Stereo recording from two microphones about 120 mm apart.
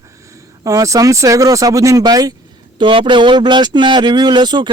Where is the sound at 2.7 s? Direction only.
45° right (ahead or behind).